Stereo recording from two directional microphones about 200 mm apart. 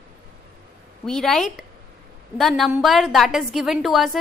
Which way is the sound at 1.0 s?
Centre (ahead or behind).